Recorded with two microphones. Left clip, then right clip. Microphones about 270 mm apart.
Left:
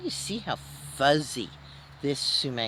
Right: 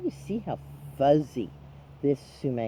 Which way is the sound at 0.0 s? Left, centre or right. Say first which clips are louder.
Even; centre.